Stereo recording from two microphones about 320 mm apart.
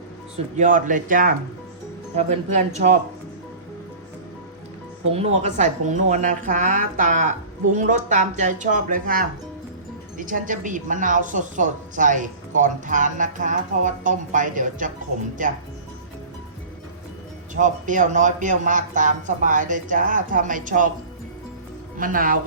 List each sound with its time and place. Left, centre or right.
0.5 s a woman's voice: right
5.1 s a woman's voice: centre
17.5 s a woman's voice: right
21.9 s a woman's voice: right